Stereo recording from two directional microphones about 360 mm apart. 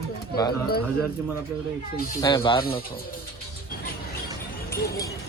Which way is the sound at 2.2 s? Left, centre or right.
Centre.